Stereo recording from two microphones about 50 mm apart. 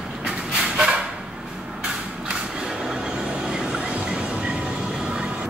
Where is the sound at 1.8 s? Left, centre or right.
Centre.